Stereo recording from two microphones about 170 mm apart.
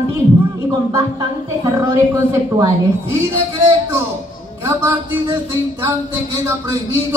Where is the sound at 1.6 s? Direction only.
20° right (ahead or behind).